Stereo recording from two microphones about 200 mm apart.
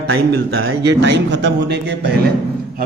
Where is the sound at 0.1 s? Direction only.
55° right (ahead or behind).